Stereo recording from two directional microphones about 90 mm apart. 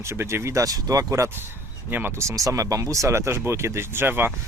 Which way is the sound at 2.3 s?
40° right (ahead or behind).